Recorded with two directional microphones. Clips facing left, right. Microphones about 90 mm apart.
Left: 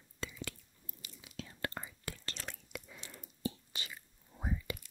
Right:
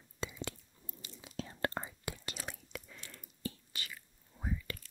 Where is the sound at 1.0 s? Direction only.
35° right (ahead or behind).